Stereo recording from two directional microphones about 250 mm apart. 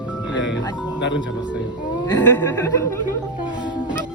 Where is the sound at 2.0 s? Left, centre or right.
Centre.